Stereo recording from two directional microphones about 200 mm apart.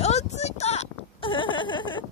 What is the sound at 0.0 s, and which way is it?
Whimper, 35° left (ahead or behind).